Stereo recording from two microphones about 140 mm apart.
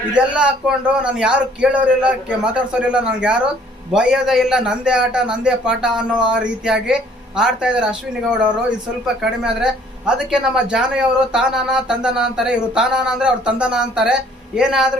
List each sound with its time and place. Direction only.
0.3 s a man's voice: 5° right (ahead or behind)